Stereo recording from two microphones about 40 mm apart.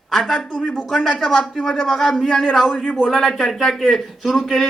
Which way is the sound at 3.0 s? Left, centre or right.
Centre.